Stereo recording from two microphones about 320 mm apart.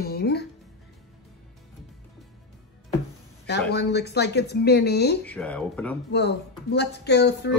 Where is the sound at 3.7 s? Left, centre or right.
Left.